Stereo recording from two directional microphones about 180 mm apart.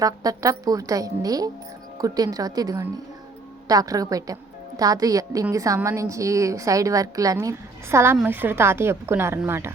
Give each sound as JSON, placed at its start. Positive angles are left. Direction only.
{"t": 0.0, "sound": "a woman's voice", "side_deg": -20}